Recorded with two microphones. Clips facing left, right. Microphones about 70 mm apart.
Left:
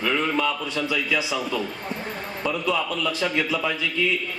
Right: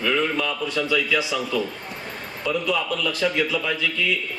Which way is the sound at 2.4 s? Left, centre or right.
Left.